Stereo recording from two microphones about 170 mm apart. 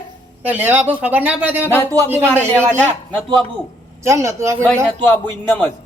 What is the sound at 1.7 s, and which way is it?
Speech, 15° left (ahead or behind).